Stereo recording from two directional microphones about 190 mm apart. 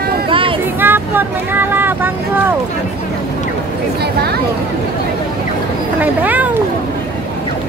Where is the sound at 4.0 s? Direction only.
60° right (ahead or behind).